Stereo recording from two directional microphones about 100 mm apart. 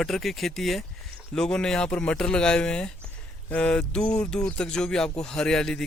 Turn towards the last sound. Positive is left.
turn(degrees=5)  # may be behind; listen again after turning